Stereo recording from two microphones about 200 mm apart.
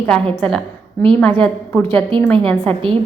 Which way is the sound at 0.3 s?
Centre (ahead or behind).